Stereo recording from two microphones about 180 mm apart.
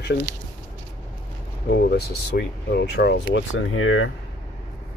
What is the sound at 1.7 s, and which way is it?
Speech, 65° left (ahead or behind).